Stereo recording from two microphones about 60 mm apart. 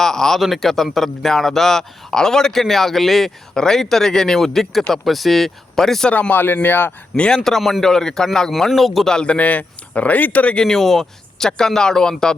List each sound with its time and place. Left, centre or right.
0.0 s speech: centre
6.1 s speech: left
6.3 s speech: left
7.2 s speech: centre
9.1 s speech: centre